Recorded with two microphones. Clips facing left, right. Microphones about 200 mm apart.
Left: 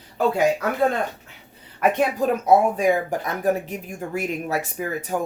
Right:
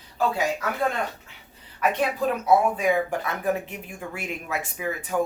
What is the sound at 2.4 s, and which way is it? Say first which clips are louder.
Speech: left 3 dB; 40° left (ahead or behind).